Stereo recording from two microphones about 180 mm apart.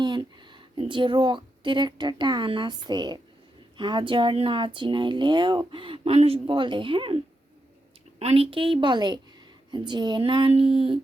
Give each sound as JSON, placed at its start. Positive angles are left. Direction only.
{"t": 0.0, "sound": "a woman's voice", "side_deg": -25}
{"t": 8.2, "sound": "speech", "side_deg": -30}